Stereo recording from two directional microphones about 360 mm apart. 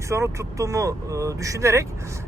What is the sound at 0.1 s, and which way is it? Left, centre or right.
Speech, centre.